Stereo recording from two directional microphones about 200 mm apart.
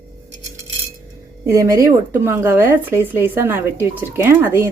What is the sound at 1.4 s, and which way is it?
Speech, 15° right (ahead or behind).